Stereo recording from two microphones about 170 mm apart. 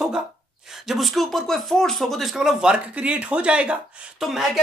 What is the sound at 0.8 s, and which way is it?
Speech, centre (ahead or behind).